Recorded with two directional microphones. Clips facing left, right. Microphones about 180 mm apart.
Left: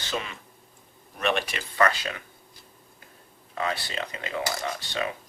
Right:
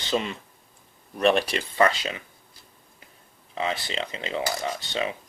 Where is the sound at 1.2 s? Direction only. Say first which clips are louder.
Right 6 dB; 35° right (ahead or behind).